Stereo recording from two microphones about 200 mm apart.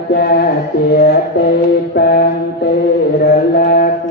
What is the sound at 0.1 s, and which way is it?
Mantra, 50° left (ahead or behind).